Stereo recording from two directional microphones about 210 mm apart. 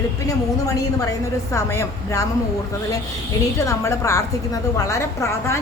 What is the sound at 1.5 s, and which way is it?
Speech, 15° left (ahead or behind).